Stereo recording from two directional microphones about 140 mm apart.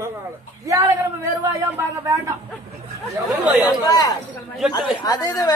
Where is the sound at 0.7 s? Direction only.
20° right (ahead or behind).